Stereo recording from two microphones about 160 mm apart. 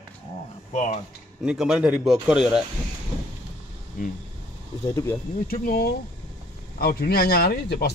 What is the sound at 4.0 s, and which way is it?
Speech, 55° left (ahead or behind).